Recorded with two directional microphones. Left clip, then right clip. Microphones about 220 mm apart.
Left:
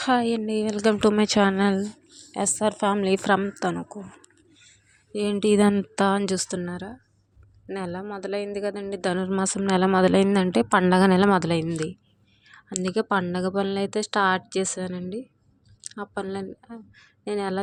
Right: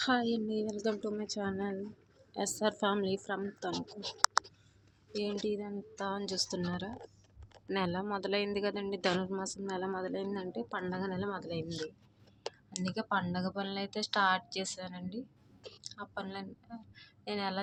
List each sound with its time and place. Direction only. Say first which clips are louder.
0.0 s speech: left 9 dB; 35° left (ahead or behind)
2.3 s speech: left 9 dB; 30° left (ahead or behind)
5.1 s speech: left 14 dB; 35° left (ahead or behind)
6.7 s speech: left 5 dB; 25° left (ahead or behind); by 11.9 s 45° left (ahead or behind)
12.7 s speech: left 11 dB; 35° left (ahead or behind)